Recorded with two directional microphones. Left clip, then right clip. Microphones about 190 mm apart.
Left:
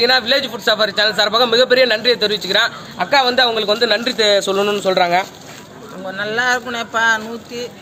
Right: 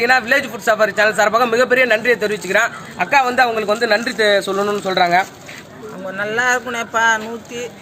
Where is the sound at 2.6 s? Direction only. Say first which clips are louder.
Even; centre (ahead or behind).